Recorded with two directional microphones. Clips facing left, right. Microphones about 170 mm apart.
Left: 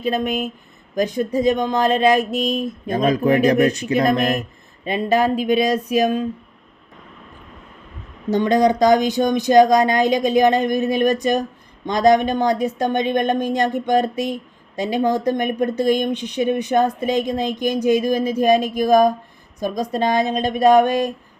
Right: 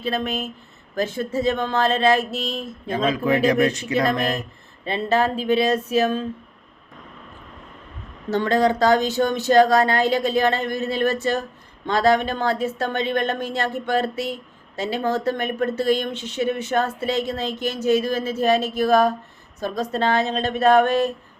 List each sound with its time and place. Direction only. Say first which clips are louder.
0.0 s speech: left 4 dB; 15° left (ahead or behind)
3.2 s speech: left 3 dB; 40° left (ahead or behind)
4.2 s speech: left 4 dB; 15° left (ahead or behind)
8.3 s speech: left 3 dB; 15° left (ahead or behind)